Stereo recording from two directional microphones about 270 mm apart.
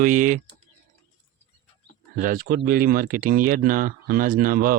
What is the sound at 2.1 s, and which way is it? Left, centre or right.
Speech, right.